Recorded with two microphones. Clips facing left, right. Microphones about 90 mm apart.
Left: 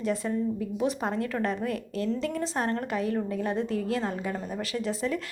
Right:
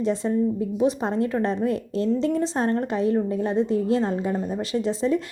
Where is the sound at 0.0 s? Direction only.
25° right (ahead or behind).